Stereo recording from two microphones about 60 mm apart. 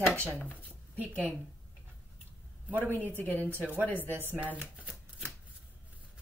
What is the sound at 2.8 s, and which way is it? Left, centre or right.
Speech, left.